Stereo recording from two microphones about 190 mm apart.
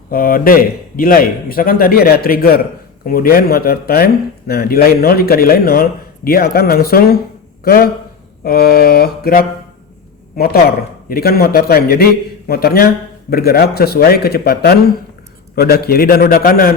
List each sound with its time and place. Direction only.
0.1 s a man's voice: 50° left (ahead or behind)